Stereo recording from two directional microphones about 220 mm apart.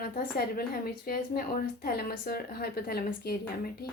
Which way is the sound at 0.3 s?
45° left (ahead or behind).